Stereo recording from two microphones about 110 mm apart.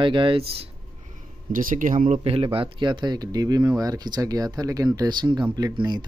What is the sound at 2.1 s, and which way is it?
Speech, 65° right (ahead or behind).